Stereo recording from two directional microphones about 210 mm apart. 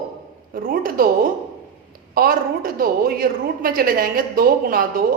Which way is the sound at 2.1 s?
45° right (ahead or behind).